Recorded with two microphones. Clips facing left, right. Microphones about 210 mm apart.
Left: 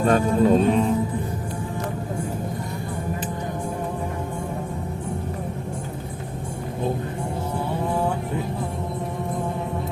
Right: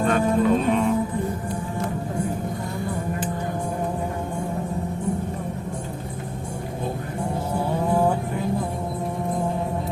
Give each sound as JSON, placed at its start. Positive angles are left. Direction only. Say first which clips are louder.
{"t": 0.1, "sound": "music", "louder": "left 3 dB", "side_deg": 35}